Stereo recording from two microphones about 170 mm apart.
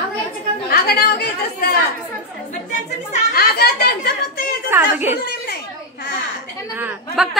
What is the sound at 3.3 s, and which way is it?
Chatter, 65° left (ahead or behind).